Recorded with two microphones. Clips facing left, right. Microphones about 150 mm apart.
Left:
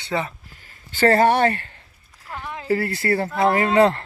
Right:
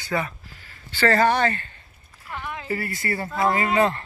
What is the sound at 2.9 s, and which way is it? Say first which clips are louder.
Speech: left 6 dB; 70° left (ahead or behind).